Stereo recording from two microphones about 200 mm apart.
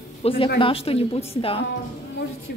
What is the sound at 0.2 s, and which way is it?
A woman's voice, 25° left (ahead or behind).